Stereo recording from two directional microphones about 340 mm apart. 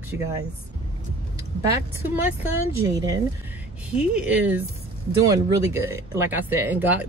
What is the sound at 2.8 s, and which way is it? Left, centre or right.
Speech, centre.